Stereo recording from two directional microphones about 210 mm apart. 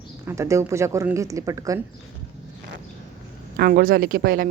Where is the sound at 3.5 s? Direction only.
45° right (ahead or behind).